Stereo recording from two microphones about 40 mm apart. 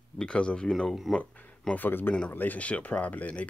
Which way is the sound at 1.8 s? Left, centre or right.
Left.